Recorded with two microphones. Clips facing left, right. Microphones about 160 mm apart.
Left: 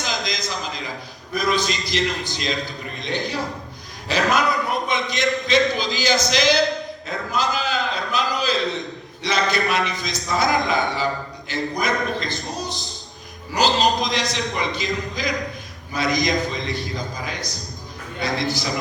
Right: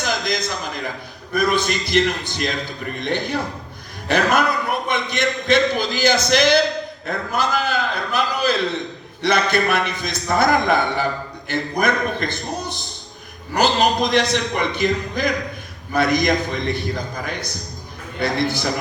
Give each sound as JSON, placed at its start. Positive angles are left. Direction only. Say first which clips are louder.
{"t": 0.0, "sound": "a man's voice", "louder": "right 4 dB", "side_deg": -55}